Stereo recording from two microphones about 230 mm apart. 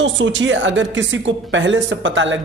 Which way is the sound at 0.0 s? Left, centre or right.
Right.